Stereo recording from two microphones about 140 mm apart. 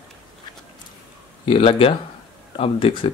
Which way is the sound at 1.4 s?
45° left (ahead or behind).